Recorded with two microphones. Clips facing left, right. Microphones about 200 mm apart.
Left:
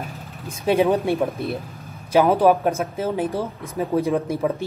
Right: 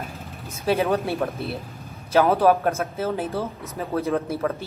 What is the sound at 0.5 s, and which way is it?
A man's voice, 15° left (ahead or behind).